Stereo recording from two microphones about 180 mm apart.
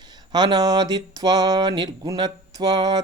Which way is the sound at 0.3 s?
25° right (ahead or behind).